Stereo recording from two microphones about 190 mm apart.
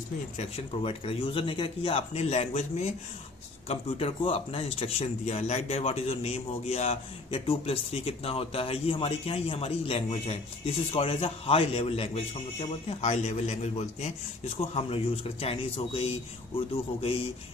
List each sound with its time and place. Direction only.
0.3 s speech: 30° left (ahead or behind)